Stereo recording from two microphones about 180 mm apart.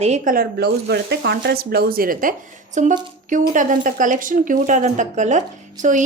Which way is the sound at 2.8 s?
40° right (ahead or behind).